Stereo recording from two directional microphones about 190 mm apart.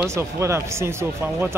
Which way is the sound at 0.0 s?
15° right (ahead or behind).